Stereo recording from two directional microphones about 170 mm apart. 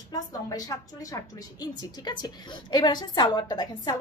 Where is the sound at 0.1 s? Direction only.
20° left (ahead or behind).